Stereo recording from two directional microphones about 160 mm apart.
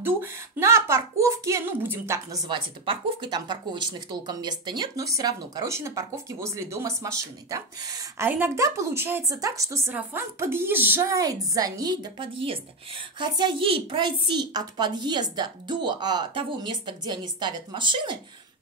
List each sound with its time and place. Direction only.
0.0 s a woman's voice: 15° right (ahead or behind)